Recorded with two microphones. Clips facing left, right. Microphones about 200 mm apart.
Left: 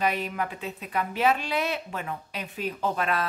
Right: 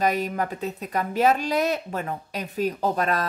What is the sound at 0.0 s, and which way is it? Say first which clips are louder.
Speech: right 4 dB; 40° right (ahead or behind).